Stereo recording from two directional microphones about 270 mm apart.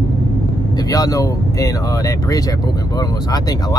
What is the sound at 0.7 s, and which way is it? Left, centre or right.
Speech, centre.